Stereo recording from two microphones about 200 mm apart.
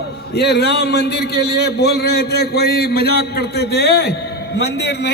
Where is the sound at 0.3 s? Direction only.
55° left (ahead or behind).